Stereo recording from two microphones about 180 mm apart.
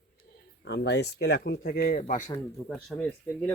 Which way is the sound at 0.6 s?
75° left (ahead or behind).